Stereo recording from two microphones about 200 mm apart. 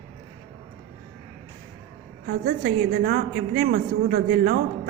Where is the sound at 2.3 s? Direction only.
50° right (ahead or behind).